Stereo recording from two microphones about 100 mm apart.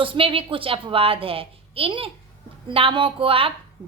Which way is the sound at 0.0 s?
60° right (ahead or behind).